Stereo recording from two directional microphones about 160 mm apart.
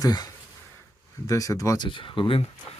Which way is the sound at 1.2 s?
20° left (ahead or behind).